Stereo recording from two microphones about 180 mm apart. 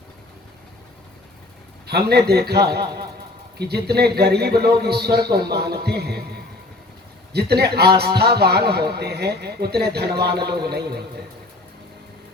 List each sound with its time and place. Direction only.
1.9 s a man's voice: 65° right (ahead or behind)
7.3 s a man's voice: 65° right (ahead or behind)